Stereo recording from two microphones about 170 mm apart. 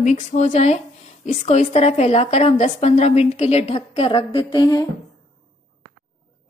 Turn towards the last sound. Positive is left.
turn(degrees=25)  # may be behind; listen again after turning